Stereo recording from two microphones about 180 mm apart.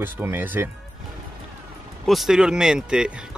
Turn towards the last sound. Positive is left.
turn(degrees=-5)  # may be behind; listen again after turning